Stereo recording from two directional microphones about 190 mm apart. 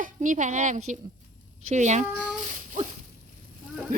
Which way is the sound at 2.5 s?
40° right (ahead or behind).